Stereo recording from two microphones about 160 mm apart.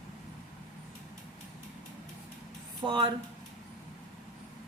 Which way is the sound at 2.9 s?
30° right (ahead or behind).